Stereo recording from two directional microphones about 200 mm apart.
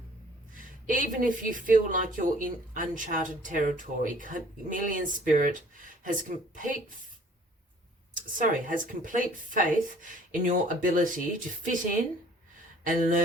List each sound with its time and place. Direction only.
0.5 s a woman's voice: 40° right (ahead or behind)
8.1 s a woman's voice: 40° right (ahead or behind)
12.8 s speech: 40° right (ahead or behind)